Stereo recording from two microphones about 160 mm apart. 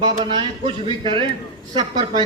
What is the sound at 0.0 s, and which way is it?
A man's voice, 30° right (ahead or behind).